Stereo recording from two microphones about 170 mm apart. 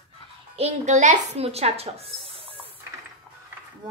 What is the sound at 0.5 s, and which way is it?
Speech, 40° right (ahead or behind).